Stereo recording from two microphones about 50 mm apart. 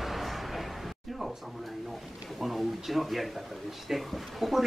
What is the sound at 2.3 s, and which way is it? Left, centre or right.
Speech, centre.